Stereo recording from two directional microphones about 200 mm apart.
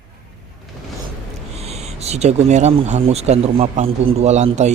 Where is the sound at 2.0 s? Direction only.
35° right (ahead or behind).